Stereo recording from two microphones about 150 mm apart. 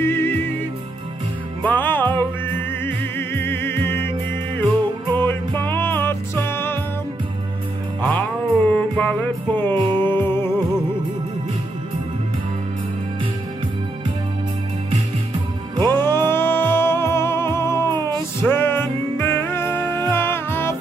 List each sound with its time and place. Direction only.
0.0 s music: 15° left (ahead or behind)
1.6 s music: 10° left (ahead or behind)
5.1 s music: 15° left (ahead or behind)
8.6 s music: 10° left (ahead or behind)
15.8 s music: 15° left (ahead or behind)